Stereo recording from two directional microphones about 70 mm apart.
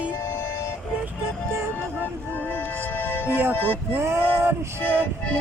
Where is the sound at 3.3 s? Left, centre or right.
Right.